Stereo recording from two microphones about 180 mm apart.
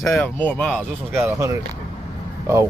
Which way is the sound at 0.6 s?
Centre (ahead or behind).